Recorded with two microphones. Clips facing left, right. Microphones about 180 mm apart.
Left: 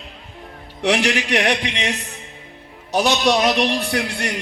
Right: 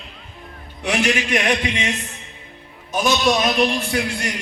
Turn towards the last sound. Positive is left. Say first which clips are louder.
# even
turn(degrees=65)  # may be behind; listen again after turning